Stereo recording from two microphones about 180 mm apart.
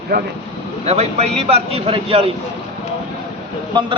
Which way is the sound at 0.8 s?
35° right (ahead or behind).